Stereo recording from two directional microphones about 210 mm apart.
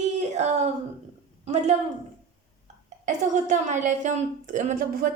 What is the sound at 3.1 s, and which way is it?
Speech, 35° right (ahead or behind).